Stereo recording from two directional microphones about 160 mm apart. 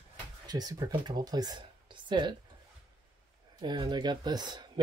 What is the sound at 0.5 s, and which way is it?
Speech, 25° right (ahead or behind).